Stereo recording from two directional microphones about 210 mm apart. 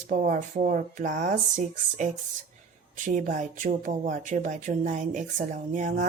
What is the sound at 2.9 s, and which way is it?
Speech, 35° right (ahead or behind).